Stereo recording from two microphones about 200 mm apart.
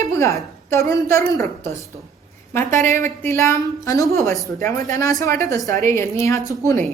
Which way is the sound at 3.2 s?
15° left (ahead or behind).